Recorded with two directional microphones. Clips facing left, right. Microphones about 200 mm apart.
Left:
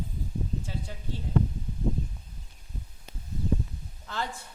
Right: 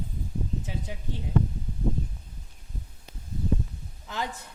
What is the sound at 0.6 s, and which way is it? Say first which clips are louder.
Speech: right 1 dB; 20° right (ahead or behind).